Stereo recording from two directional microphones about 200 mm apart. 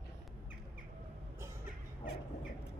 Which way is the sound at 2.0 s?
55° left (ahead or behind).